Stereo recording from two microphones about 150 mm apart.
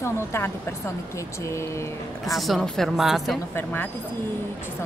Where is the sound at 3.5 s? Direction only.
15° left (ahead or behind).